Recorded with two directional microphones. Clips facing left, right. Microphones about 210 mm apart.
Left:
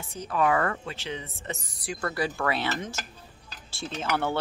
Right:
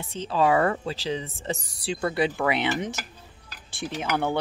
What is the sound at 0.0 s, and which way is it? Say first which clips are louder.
A woman's voice: right 3 dB; 25° right (ahead or behind).